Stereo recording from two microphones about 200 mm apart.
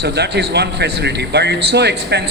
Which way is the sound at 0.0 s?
55° right (ahead or behind).